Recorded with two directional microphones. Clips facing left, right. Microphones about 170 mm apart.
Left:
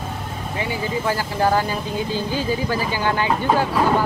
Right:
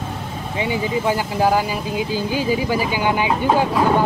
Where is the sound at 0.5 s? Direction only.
15° right (ahead or behind).